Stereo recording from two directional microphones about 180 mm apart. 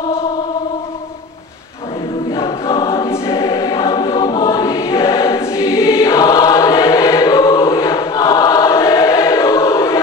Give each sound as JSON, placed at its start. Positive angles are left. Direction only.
{"t": 2.8, "sound": "choir", "side_deg": 20}